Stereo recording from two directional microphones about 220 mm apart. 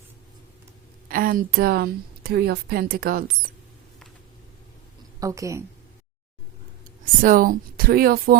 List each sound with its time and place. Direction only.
1.0 s a woman's voice: 40° right (ahead or behind)
5.2 s a woman's voice: 15° right (ahead or behind)
7.0 s a woman's voice: 40° right (ahead or behind)